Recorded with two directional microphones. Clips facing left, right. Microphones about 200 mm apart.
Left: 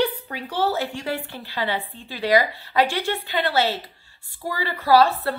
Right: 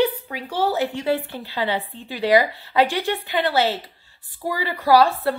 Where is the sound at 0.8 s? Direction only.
20° right (ahead or behind).